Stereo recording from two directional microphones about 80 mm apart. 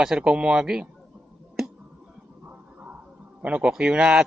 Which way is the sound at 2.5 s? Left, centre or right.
Right.